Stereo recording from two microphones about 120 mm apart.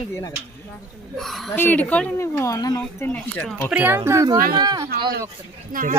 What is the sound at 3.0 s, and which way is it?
Speech, 10° left (ahead or behind).